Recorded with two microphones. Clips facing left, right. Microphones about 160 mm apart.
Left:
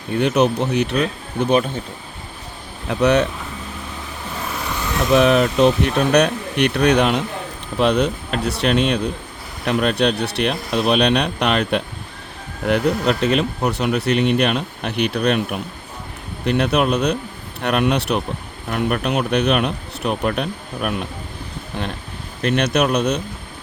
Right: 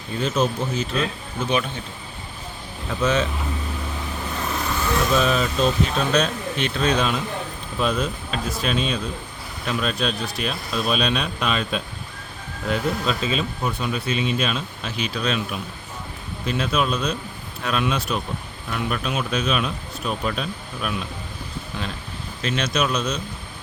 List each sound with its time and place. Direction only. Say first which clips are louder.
0.1 s speech: left 6 dB; 65° left (ahead or behind)
2.9 s speech: left 6 dB; 70° left (ahead or behind)
5.1 s speech: left 10 dB; 65° left (ahead or behind)
16.5 s speech: left 6 dB; 70° left (ahead or behind)
18.7 s speech: left 6 dB; 55° left (ahead or behind)
22.4 s speech: left 6 dB; 60° left (ahead or behind)